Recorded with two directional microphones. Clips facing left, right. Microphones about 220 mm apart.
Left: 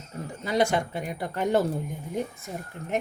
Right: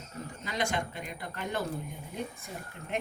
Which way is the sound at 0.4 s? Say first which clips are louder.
Left 9 dB; 45° left (ahead or behind).